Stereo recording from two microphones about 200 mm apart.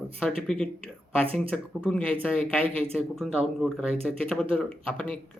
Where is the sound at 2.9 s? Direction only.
Centre (ahead or behind).